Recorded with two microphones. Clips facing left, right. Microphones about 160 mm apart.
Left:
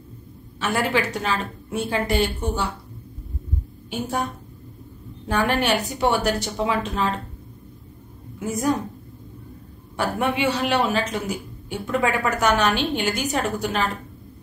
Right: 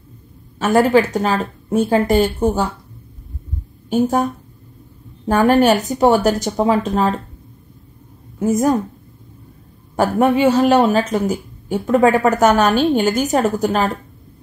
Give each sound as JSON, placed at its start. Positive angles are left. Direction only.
{"t": 0.6, "sound": "speech", "side_deg": -45}
{"t": 3.9, "sound": "speech", "side_deg": -45}
{"t": 8.4, "sound": "speech", "side_deg": -45}
{"t": 9.9, "sound": "speech", "side_deg": -45}